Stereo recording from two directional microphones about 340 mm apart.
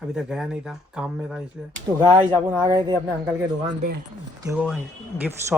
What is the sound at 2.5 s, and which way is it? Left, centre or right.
Speech, centre.